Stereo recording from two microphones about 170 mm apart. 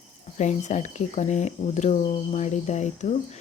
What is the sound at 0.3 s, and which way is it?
Speech, 45° left (ahead or behind).